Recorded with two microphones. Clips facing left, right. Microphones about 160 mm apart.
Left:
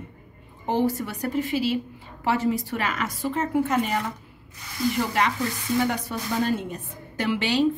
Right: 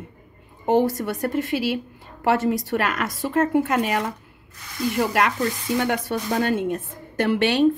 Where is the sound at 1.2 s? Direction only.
55° right (ahead or behind); by 4.0 s 75° right (ahead or behind).